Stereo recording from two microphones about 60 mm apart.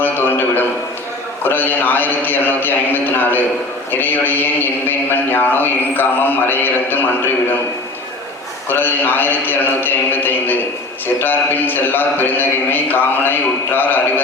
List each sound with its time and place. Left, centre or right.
0.0 s a sound: left
1.5 s a man's voice: left
8.7 s a man's voice: left